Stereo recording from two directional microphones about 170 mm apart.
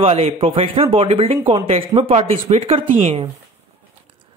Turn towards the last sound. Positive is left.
turn(degrees=-35)  # may be behind; listen again after turning